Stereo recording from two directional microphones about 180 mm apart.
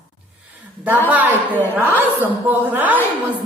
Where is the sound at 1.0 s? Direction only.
10° right (ahead or behind).